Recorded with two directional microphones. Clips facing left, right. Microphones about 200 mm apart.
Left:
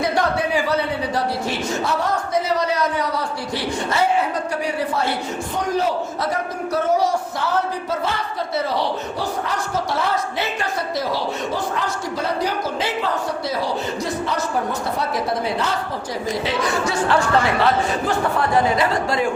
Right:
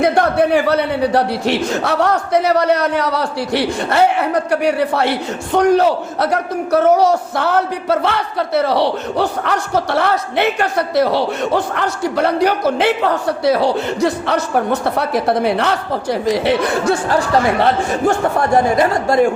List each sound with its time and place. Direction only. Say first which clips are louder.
0.0 s a man's voice: right 7 dB; 55° right (ahead or behind)
17.6 s speech: right 4 dB; 50° right (ahead or behind)